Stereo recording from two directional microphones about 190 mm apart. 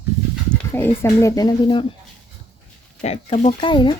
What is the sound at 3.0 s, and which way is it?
Speech, 35° left (ahead or behind).